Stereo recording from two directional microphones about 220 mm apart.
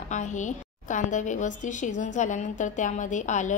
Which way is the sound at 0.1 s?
35° left (ahead or behind).